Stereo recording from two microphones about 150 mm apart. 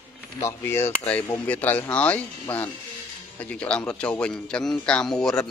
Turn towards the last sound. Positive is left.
turn(degrees=5)  # may be behind; listen again after turning